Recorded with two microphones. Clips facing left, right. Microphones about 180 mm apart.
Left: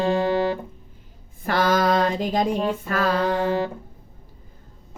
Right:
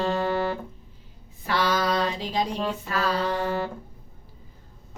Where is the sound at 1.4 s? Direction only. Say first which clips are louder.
Left 4 dB; 50° left (ahead or behind).